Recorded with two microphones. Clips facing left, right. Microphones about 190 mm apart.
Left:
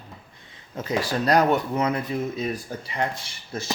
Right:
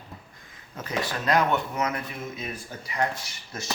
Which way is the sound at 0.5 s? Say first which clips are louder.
Left 7 dB; 25° left (ahead or behind).